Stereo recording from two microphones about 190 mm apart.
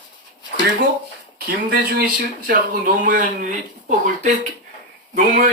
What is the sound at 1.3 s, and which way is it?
Speech, 55° right (ahead or behind).